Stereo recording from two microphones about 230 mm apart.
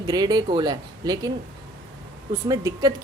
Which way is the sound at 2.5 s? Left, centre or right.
Centre.